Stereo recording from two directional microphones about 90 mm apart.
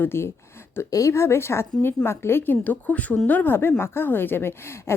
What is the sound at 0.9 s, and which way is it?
A woman's voice, 35° left (ahead or behind).